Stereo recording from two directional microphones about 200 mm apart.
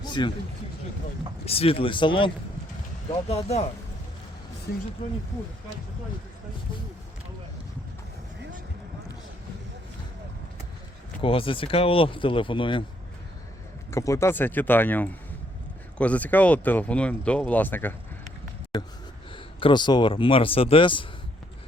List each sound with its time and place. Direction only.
0.0 s a sound: 20° left (ahead or behind)
1.5 s speech: 30° left (ahead or behind)
11.2 s speech: 25° left (ahead or behind)
13.9 s speech: 15° left (ahead or behind)